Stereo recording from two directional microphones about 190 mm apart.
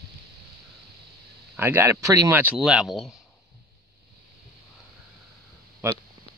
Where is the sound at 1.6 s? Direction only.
10° right (ahead or behind).